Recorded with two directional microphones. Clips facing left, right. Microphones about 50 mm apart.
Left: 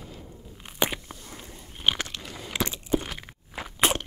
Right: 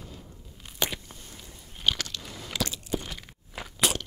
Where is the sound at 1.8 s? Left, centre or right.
Left.